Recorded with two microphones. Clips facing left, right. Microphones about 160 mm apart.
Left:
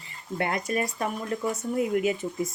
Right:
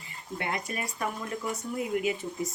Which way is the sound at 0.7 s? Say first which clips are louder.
Left 8 dB; 40° left (ahead or behind).